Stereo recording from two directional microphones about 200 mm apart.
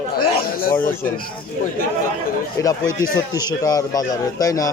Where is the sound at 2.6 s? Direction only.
15° left (ahead or behind).